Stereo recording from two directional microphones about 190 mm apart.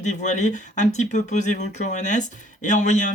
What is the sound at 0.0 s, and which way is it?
Speech, 40° left (ahead or behind).